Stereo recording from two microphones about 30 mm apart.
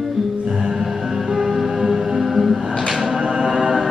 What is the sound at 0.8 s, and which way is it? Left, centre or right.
Music, centre.